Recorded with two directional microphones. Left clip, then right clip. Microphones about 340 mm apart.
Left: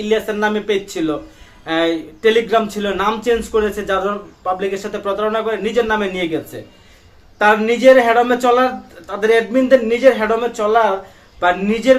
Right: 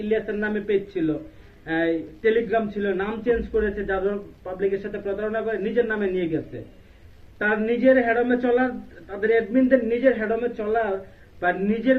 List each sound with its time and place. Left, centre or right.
0.0 s speech: left